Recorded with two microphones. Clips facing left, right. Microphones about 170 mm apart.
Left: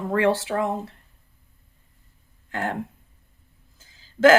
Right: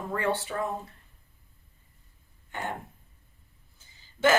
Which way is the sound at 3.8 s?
90° left.